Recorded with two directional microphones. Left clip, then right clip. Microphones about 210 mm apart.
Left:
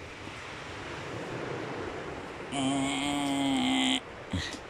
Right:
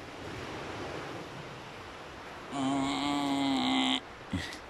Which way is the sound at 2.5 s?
5° left (ahead or behind).